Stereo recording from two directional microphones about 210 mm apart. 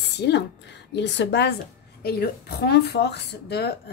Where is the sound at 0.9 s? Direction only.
55° left (ahead or behind).